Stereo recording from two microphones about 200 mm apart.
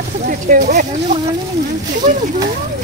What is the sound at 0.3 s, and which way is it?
Speech, 45° right (ahead or behind).